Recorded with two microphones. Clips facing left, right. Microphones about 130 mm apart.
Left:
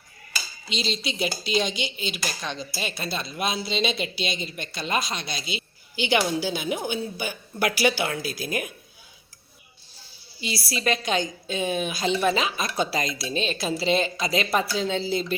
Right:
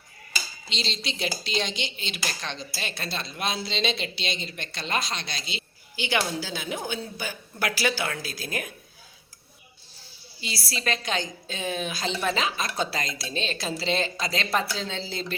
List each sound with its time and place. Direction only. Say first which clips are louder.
0.7 s a woman's voice: left 4 dB; 10° left (ahead or behind)
10.4 s a woman's voice: left 4 dB; 15° left (ahead or behind)